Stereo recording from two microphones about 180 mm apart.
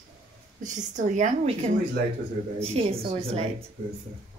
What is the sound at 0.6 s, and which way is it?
Speech, 45° right (ahead or behind).